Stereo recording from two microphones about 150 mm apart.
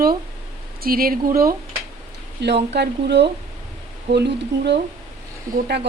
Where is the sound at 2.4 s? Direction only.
90° right.